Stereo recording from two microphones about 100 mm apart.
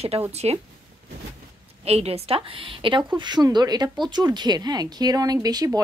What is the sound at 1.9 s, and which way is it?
A woman's voice, 90° right.